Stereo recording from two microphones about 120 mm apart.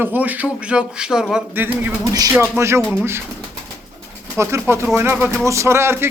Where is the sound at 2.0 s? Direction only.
30° right (ahead or behind).